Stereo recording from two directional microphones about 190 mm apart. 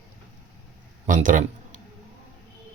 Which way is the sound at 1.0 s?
45° right (ahead or behind).